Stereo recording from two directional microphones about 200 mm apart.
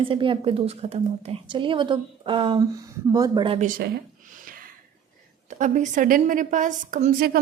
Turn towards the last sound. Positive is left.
turn(degrees=-45)  # may be behind; listen again after turning